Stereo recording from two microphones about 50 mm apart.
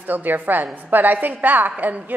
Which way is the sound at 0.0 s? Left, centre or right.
Right.